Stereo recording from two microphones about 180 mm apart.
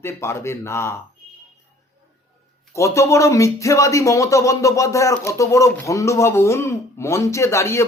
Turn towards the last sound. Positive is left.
turn(degrees=15)  # may be behind; listen again after turning